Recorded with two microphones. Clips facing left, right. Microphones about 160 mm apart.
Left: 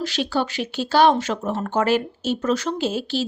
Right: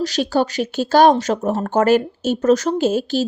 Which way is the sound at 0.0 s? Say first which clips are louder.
Right 5 dB; 40° right (ahead or behind).